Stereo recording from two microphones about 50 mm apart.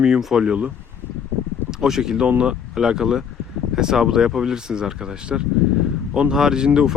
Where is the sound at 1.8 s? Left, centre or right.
Centre.